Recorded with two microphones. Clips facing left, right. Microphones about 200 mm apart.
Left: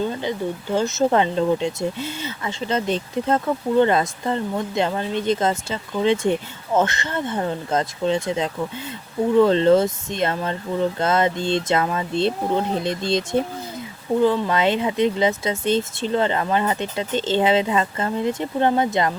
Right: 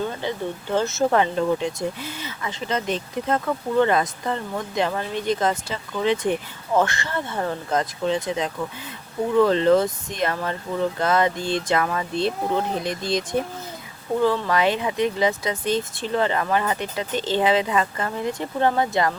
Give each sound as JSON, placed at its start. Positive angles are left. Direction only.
{"t": 0.2, "sound": "speech", "side_deg": 15}